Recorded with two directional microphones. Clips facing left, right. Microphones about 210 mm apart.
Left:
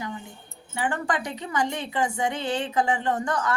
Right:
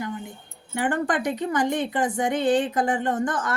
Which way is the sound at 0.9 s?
55° right (ahead or behind).